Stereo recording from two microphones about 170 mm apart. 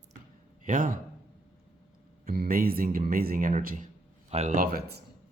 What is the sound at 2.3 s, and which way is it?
A man's voice, 60° right (ahead or behind).